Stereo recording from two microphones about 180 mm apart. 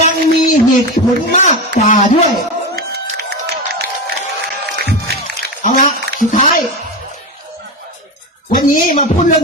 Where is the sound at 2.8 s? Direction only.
60° right (ahead or behind).